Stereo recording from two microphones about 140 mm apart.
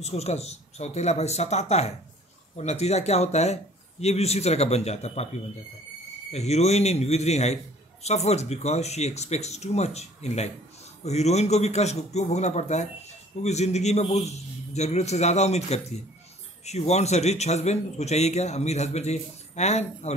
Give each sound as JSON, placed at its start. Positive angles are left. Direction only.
{"t": 0.0, "sound": "a man's voice", "side_deg": 50}
{"t": 6.3, "sound": "a man's voice", "side_deg": 50}